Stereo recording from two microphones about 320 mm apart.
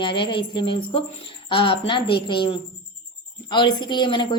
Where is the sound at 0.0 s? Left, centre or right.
Centre.